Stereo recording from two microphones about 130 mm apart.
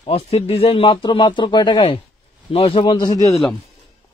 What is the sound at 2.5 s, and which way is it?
Speech, 50° left (ahead or behind).